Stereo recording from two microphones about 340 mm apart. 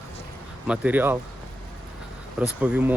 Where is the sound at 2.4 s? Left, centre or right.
Centre.